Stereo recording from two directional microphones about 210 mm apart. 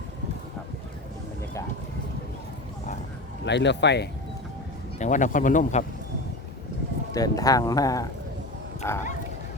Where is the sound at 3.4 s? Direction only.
55° left (ahead or behind).